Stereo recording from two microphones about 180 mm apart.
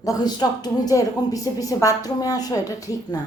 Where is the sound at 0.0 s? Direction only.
20° left (ahead or behind).